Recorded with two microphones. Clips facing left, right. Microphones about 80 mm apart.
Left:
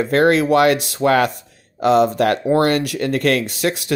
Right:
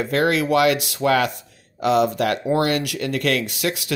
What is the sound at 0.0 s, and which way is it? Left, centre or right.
Speech, left.